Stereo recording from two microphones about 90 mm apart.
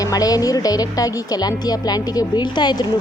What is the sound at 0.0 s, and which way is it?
Speech, 45° left (ahead or behind).